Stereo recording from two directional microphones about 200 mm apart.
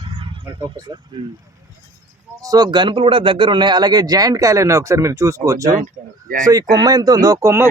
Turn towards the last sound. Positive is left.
turn(degrees=-15)  # may be behind; listen again after turning